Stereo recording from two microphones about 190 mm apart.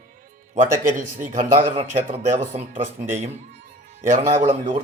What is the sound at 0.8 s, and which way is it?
A man's voice, 45° right (ahead or behind).